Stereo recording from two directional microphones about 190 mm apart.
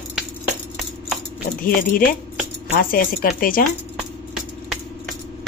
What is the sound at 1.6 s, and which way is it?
Speech, 50° left (ahead or behind).